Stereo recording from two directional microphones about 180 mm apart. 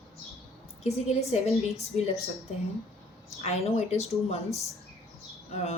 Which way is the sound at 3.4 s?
35° left (ahead or behind).